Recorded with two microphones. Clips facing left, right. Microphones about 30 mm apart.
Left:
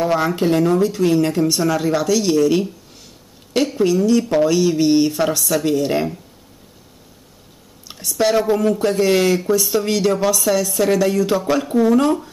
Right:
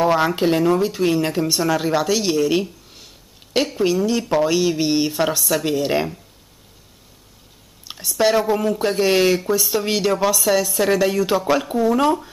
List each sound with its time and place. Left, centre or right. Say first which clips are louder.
0.0 s speech: right 1 dB; centre
5.7 s speech: left 2 dB; centre
8.0 s speech: left 1 dB; centre